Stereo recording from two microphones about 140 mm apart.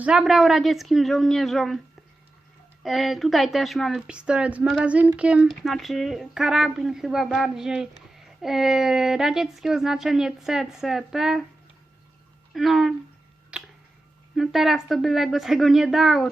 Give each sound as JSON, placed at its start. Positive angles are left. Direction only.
{"t": 0.0, "sound": "speech", "side_deg": -5}
{"t": 2.8, "sound": "speech", "side_deg": 0}
{"t": 12.5, "sound": "speech", "side_deg": 0}
{"t": 13.5, "sound": "tick", "side_deg": -5}
{"t": 14.3, "sound": "speech", "side_deg": 0}